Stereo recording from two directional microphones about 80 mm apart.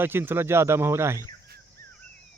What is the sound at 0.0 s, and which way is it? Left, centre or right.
Speech, right.